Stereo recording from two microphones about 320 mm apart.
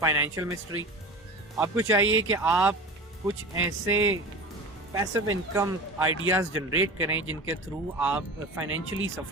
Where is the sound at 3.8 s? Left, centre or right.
Right.